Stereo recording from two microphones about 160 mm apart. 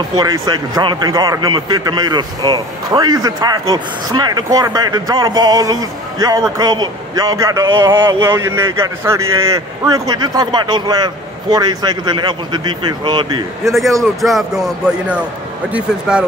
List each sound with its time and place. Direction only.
0.1 s a man's voice: 25° right (ahead or behind)
14.2 s speech: centre (ahead or behind)